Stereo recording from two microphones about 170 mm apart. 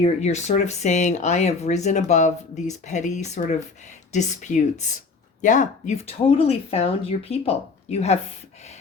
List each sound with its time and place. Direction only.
0.0 s speech: 40° left (ahead or behind)